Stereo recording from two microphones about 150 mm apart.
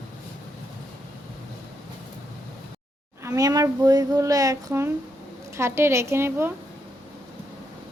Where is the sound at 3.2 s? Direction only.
20° right (ahead or behind).